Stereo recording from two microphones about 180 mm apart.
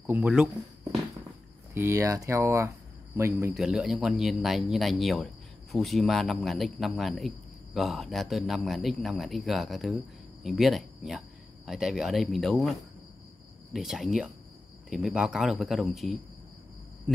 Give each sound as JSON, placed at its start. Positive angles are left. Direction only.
{"t": 0.0, "sound": "speech", "side_deg": -10}
{"t": 1.7, "sound": "speech", "side_deg": -15}
{"t": 3.5, "sound": "speech", "side_deg": 0}
{"t": 13.7, "sound": "speech", "side_deg": 0}